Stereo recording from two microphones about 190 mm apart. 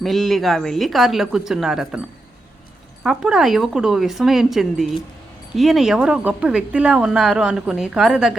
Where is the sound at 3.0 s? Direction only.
5° right (ahead or behind).